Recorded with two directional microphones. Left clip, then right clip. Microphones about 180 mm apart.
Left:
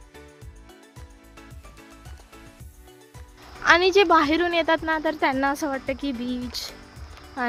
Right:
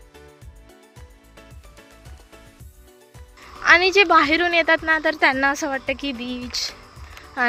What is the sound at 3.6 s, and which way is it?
A woman's voice, 20° left (ahead or behind).